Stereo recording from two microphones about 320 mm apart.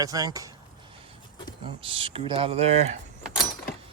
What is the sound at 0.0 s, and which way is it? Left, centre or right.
Speech, centre.